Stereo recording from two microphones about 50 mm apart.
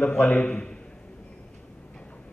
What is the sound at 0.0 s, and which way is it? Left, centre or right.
Speech, left.